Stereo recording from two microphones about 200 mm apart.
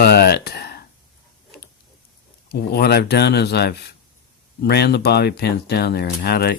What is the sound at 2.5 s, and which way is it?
Speech, 50° left (ahead or behind).